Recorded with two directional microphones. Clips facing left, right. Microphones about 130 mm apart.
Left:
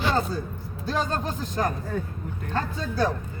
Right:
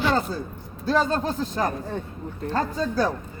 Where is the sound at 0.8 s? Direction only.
40° right (ahead or behind).